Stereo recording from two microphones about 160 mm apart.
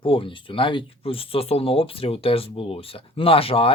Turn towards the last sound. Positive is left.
turn(degrees=35)  # may be behind; listen again after turning